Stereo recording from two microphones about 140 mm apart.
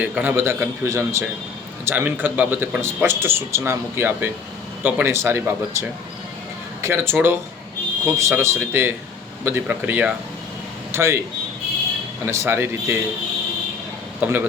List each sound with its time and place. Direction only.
0.0 s a man's voice: 10° right (ahead or behind)
6.8 s a man's voice: 15° right (ahead or behind)
12.2 s a man's voice: 20° right (ahead or behind)
14.2 s speech: 15° right (ahead or behind)